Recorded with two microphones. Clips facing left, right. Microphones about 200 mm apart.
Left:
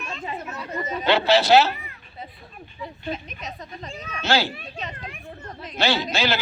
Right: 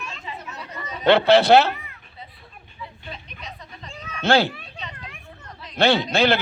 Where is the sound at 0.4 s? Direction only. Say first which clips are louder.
Left 6 dB; 50° left (ahead or behind).